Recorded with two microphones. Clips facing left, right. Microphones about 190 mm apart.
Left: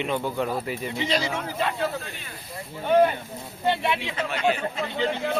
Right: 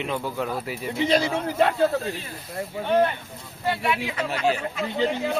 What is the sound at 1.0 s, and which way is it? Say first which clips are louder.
Speech: right 5 dB; 55° right (ahead or behind).